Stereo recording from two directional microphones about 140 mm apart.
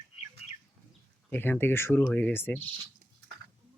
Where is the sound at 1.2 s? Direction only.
15° left (ahead or behind).